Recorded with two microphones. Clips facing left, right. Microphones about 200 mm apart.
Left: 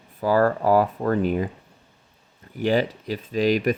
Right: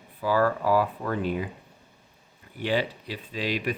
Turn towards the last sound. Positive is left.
turn(degrees=45)  # may be behind; listen again after turning